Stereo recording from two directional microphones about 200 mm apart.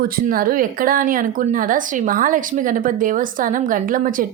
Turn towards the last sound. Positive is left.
turn(degrees=-45)  # may be behind; listen again after turning